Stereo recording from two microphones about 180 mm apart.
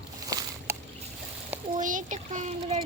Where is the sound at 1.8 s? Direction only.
45° right (ahead or behind).